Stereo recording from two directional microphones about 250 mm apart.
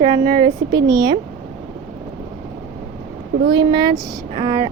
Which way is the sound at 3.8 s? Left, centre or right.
Centre.